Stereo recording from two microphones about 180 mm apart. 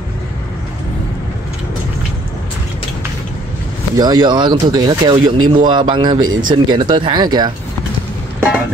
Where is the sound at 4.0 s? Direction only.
20° right (ahead or behind).